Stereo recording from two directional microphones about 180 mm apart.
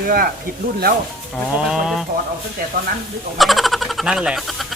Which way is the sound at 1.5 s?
5° right (ahead or behind).